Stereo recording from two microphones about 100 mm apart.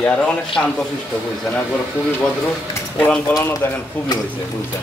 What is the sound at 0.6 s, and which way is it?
Speech, 10° left (ahead or behind).